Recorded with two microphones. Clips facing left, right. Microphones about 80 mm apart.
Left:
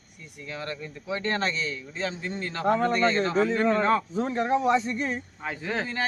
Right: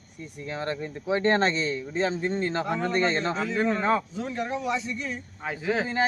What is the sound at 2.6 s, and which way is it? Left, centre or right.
Speech, left.